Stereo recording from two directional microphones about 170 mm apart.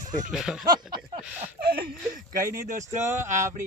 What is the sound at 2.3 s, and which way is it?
Speech, 50° right (ahead or behind).